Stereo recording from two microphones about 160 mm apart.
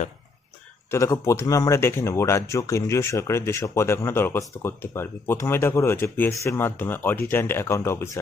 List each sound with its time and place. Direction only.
0.9 s speech: 20° left (ahead or behind)